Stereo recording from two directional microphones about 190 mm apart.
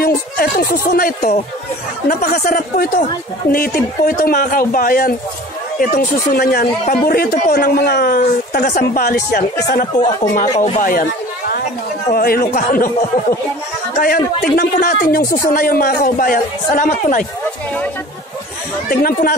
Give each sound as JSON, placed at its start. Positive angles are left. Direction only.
{"t": 0.0, "sound": "speech", "side_deg": 50}
{"t": 10.6, "sound": "a sound", "side_deg": 45}
{"t": 12.1, "sound": "speech", "side_deg": 50}
{"t": 13.9, "sound": "speech", "side_deg": 50}
{"t": 18.9, "sound": "speech", "side_deg": 50}